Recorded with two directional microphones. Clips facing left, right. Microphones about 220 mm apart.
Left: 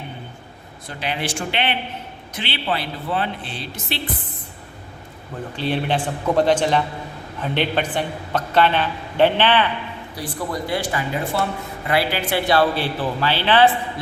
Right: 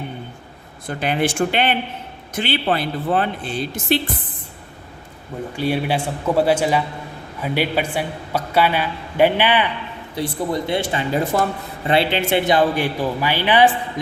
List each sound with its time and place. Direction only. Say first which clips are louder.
0.9 s a man's voice: right 6 dB; 50° right (ahead or behind)
5.5 s a man's voice: right 2 dB; 10° right (ahead or behind)
10.2 s speech: right 5 dB; 25° right (ahead or behind)
11.3 s a man's voice: right 3 dB; 45° right (ahead or behind)
11.9 s a man's voice: right 3 dB; 25° right (ahead or behind)